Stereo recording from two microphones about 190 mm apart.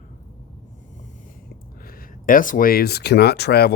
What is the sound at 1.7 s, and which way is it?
Speech, 50° left (ahead or behind).